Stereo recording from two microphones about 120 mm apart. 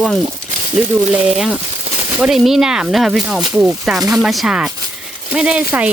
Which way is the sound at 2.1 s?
5° right (ahead or behind).